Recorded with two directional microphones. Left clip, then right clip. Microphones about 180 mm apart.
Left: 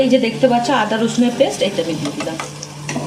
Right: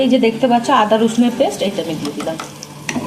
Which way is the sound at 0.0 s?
Centre (ahead or behind).